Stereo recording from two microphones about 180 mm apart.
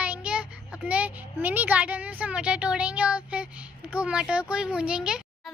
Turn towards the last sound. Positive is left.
turn(degrees=-5)  # may be behind; listen again after turning